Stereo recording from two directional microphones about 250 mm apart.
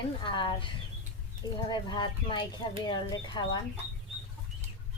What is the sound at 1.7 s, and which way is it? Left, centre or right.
A woman's voice, centre.